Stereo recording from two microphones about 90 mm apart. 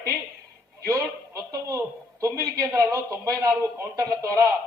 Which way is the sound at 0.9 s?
35° right (ahead or behind).